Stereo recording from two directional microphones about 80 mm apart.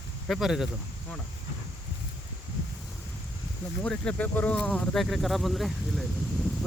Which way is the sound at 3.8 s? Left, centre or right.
Centre.